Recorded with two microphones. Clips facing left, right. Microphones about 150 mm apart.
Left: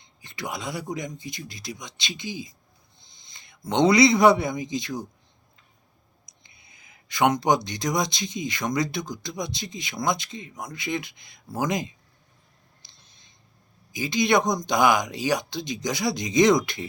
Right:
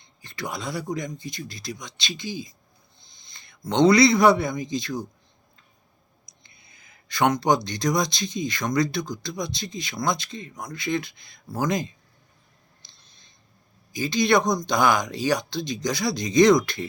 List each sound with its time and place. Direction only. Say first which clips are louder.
0.2 s speech: right 1 dB; 15° left (ahead or behind)
3.3 s a sound: even; 20° left (ahead or behind)
3.7 s speech: right 1 dB; 15° left (ahead or behind)
6.4 s speech: even; 15° left (ahead or behind)
10.8 s speech: right 4 dB; 15° left (ahead or behind)
13.9 s speech: right 1 dB; 15° left (ahead or behind)